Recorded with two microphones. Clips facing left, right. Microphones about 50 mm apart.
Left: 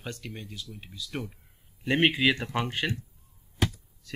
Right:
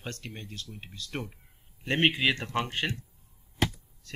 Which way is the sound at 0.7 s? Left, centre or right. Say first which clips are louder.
Left 1 dB; centre.